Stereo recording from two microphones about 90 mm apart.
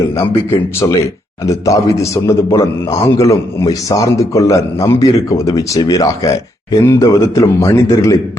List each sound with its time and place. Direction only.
0.0 s a man's voice: 30° left (ahead or behind)